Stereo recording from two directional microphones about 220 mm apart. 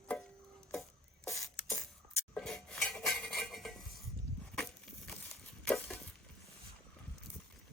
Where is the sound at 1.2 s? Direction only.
15° left (ahead or behind).